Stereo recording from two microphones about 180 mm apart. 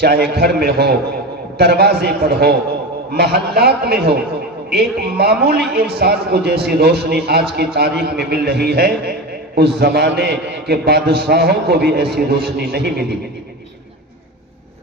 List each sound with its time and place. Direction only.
0.0 s a man's voice: 60° right (ahead or behind)